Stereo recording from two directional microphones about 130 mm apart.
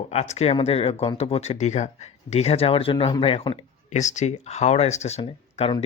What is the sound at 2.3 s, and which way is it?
Speech, 55° left (ahead or behind).